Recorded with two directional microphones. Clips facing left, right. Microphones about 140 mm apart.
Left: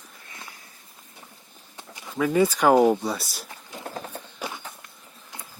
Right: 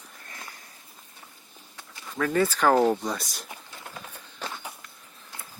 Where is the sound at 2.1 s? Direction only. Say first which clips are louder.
Left 3 dB; 10° left (ahead or behind).